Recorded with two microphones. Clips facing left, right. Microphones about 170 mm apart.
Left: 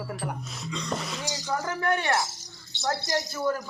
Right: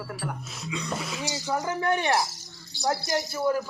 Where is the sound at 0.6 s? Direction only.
5° right (ahead or behind).